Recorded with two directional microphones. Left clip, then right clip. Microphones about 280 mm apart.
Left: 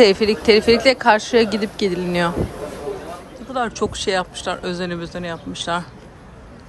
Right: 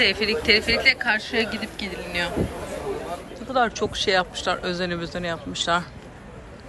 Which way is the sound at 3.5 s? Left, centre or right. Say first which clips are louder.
Even; centre.